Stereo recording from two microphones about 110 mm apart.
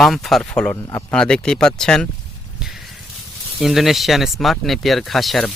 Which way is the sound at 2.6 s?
5° right (ahead or behind).